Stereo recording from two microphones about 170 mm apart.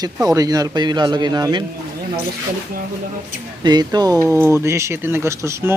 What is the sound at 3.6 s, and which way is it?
Speech, 25° right (ahead or behind).